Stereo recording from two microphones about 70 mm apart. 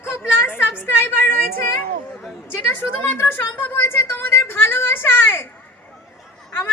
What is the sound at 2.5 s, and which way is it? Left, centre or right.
Speech, left.